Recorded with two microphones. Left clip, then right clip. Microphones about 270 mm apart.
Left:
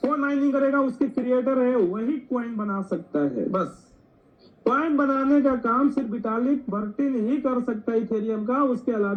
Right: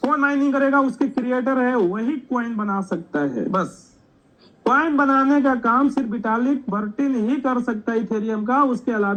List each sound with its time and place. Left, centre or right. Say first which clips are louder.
0.0 s speech: right 4 dB; right